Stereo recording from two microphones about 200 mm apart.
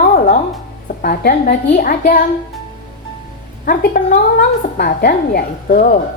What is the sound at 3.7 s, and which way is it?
A woman's voice, 45° left (ahead or behind).